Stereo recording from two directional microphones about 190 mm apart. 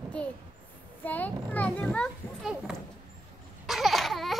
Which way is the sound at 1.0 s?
10° left (ahead or behind).